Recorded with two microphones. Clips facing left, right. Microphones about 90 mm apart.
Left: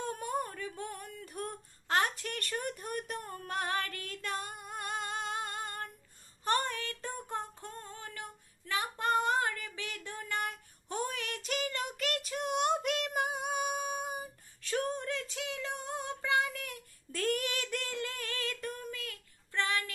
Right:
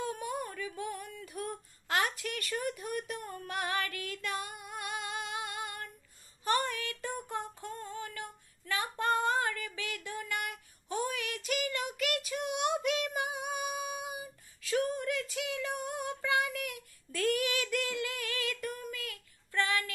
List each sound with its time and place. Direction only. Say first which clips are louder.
0.0 s a sound: left 1 dB; 40° left (ahead or behind)
3.3 s female singing: left 2 dB; 40° left (ahead or behind)
15.0 s child singing: right 3 dB; 30° left (ahead or behind)
17.1 s female singing: right 2 dB; 40° left (ahead or behind); by 19.9 s 25° left (ahead or behind)